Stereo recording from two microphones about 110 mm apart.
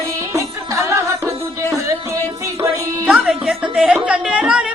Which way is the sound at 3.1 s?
5° right (ahead or behind).